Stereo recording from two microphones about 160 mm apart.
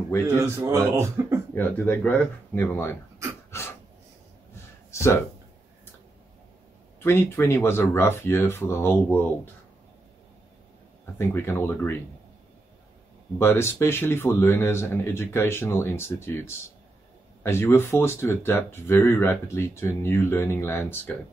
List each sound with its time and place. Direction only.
0.3 s speech: 15° right (ahead or behind)
1.5 s speech: 10° left (ahead or behind)
3.5 s a sound: 15° left (ahead or behind)
4.9 s speech: 15° left (ahead or behind)
7.0 s speech: 15° left (ahead or behind)
11.1 s speech: 15° left (ahead or behind)
13.4 s speech: 15° left (ahead or behind)